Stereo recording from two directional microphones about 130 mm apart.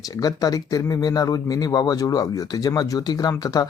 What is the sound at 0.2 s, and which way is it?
Speech, 30° left (ahead or behind).